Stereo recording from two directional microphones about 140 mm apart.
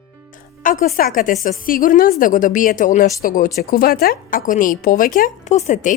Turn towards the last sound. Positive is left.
turn(degrees=65)  # may be behind; listen again after turning